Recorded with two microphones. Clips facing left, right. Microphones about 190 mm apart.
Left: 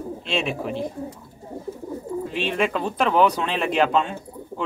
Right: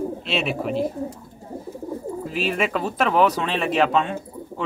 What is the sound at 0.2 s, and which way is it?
Speech, centre (ahead or behind).